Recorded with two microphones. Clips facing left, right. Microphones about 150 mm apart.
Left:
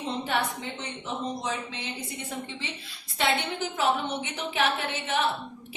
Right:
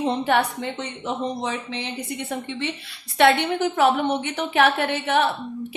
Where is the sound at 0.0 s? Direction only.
65° right (ahead or behind).